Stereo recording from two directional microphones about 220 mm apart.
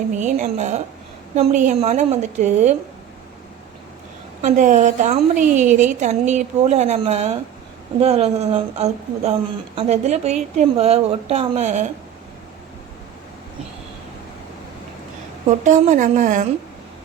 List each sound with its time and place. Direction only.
0.2 s a woman's voice: 35° right (ahead or behind)
4.4 s a woman's voice: 35° right (ahead or behind)
15.4 s a woman's voice: 35° right (ahead or behind)